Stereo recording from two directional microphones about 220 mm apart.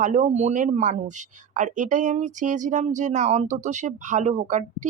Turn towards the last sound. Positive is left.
turn(degrees=-35)  # may be behind; listen again after turning